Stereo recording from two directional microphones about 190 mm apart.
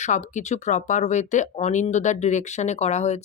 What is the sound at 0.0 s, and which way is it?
Speech, 40° left (ahead or behind).